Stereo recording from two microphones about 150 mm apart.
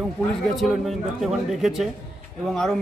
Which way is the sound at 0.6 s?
Centre (ahead or behind).